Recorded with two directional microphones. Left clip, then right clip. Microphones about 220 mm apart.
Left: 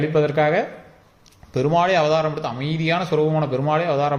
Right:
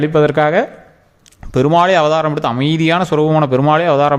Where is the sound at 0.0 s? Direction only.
35° right (ahead or behind).